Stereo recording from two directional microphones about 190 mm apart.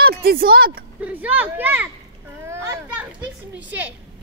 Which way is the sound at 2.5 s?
15° right (ahead or behind).